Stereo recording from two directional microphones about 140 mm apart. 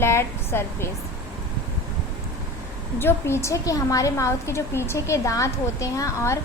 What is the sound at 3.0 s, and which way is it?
A woman's voice, 15° left (ahead or behind).